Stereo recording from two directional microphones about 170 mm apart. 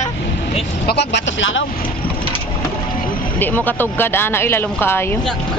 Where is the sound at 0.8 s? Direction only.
85° left.